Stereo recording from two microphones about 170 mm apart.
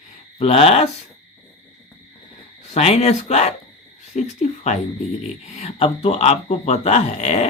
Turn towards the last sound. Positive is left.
turn(degrees=40)  # may be behind; listen again after turning